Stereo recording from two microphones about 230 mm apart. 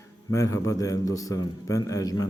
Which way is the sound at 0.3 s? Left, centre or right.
Centre.